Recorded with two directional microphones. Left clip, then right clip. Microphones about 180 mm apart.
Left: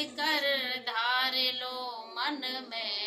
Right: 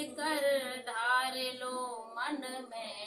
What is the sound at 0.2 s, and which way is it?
Carnatic music, 20° right (ahead or behind).